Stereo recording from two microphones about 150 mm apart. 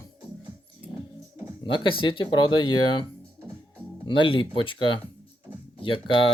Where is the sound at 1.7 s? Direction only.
35° left (ahead or behind).